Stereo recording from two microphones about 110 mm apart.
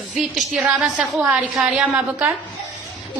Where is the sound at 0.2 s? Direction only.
5° right (ahead or behind).